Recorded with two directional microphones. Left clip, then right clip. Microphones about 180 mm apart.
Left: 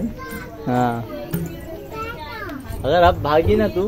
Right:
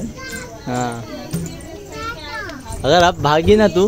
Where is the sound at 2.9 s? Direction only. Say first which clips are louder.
Right 2 dB; 40° right (ahead or behind); by 3.8 s 55° right (ahead or behind).